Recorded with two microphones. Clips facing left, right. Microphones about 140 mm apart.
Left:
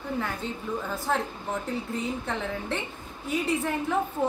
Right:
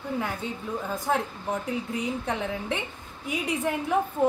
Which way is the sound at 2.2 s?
15° right (ahead or behind).